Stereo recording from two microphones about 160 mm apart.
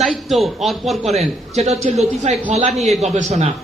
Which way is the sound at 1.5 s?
40° right (ahead or behind).